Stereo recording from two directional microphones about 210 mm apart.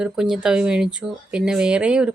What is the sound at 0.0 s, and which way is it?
Speech, 5° right (ahead or behind).